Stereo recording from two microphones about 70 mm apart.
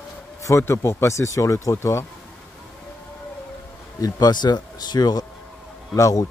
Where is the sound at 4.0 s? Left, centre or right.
Left.